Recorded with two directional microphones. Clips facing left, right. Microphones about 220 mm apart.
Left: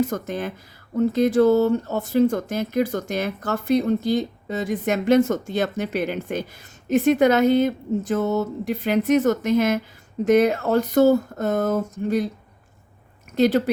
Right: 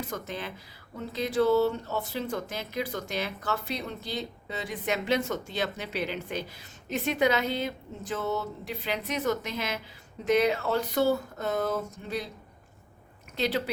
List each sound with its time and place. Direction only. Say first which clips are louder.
0.1 s speech: left 9 dB; 45° left (ahead or behind)
13.3 s speech: left 11 dB; 45° left (ahead or behind)